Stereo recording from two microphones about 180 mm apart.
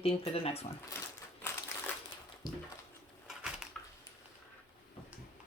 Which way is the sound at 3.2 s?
5° right (ahead or behind).